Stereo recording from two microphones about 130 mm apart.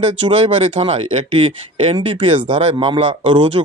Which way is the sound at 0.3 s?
45° right (ahead or behind).